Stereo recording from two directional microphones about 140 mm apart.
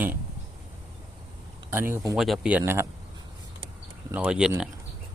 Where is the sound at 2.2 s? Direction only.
5° right (ahead or behind).